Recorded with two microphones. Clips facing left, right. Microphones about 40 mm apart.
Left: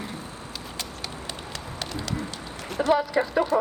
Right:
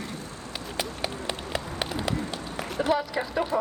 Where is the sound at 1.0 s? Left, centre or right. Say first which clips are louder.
Right 4 dB; right.